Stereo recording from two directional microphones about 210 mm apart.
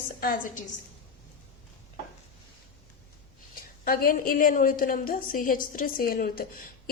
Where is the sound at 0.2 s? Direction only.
45° left (ahead or behind).